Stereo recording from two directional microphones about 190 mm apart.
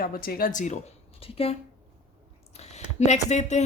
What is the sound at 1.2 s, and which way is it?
Speech, 30° left (ahead or behind).